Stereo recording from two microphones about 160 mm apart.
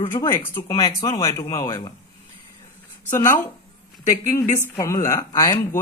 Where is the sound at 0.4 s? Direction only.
15° left (ahead or behind).